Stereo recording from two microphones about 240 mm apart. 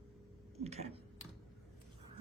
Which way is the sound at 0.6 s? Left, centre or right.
Right.